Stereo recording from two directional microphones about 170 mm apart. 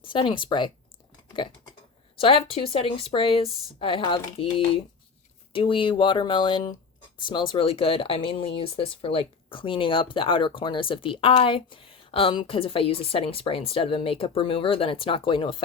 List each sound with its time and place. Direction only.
0.0 s speech: 30° left (ahead or behind)
2.1 s speech: 30° left (ahead or behind)